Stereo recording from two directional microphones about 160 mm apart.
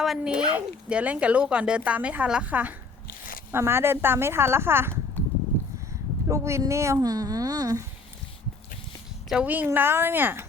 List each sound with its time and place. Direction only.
0.0 s speech: 5° right (ahead or behind)
6.2 s speech: 20° right (ahead or behind)
9.3 s speech: 10° right (ahead or behind)